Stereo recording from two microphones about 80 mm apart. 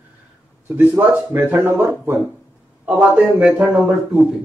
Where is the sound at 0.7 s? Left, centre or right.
Right.